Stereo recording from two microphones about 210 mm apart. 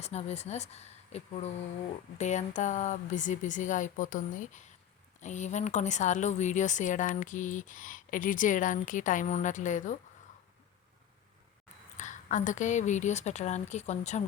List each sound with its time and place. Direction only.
0.0 s a woman's voice: 30° left (ahead or behind)
11.9 s a woman's voice: 35° left (ahead or behind)